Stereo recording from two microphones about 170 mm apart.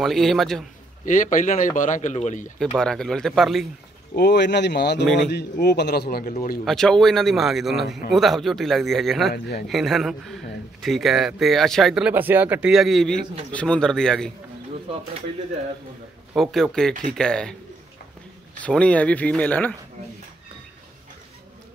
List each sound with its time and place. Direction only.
0.0 s a man's voice: centre (ahead or behind)
1.0 s a man's voice: 50° left (ahead or behind)
2.8 s a man's voice: 5° left (ahead or behind)
4.1 s a man's voice: 75° left (ahead or behind)
5.0 s a man's voice: centre (ahead or behind)
5.3 s a man's voice: 75° left (ahead or behind); by 6.6 s 55° left (ahead or behind)
6.6 s a man's voice: centre (ahead or behind)
9.3 s speech: 65° left (ahead or behind)
9.7 s a man's voice: centre (ahead or behind)
16.3 s a man's voice: centre (ahead or behind)
18.6 s speech: 5° left (ahead or behind)